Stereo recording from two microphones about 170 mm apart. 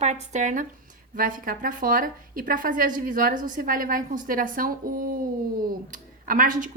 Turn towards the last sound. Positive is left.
turn(degrees=-50)  # may be behind; listen again after turning